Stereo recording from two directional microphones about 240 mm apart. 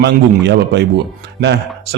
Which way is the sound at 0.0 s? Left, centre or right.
Right.